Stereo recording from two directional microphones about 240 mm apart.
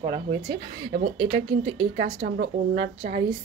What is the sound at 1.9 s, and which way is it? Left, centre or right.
Speech, right.